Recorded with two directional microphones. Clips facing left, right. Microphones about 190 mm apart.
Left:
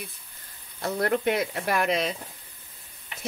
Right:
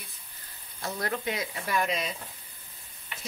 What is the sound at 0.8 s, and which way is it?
Speech, 60° left (ahead or behind).